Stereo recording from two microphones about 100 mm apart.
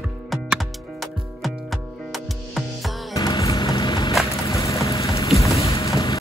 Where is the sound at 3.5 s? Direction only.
50° left (ahead or behind).